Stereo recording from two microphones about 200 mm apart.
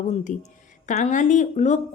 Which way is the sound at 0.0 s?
40° left (ahead or behind).